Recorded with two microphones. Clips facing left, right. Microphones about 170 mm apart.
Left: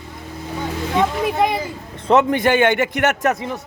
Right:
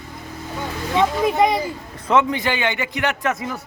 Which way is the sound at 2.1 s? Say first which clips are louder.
Left 4 dB; 45° left (ahead or behind).